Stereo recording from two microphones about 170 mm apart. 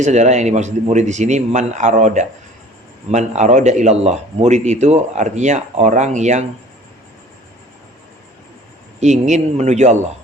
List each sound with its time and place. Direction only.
0.0 s speech: 45° right (ahead or behind)
9.0 s speech: 45° right (ahead or behind)